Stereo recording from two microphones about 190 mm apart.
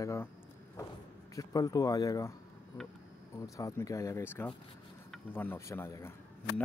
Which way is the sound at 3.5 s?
15° left (ahead or behind).